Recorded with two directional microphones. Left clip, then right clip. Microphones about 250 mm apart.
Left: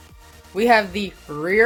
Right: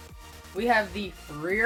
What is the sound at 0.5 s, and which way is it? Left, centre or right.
Speech, left.